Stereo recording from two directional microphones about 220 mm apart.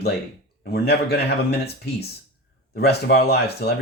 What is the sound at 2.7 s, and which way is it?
Speech, 45° left (ahead or behind).